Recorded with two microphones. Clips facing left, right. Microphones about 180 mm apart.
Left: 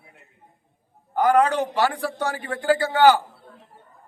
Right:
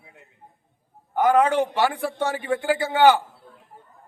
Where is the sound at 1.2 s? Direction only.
25° right (ahead or behind).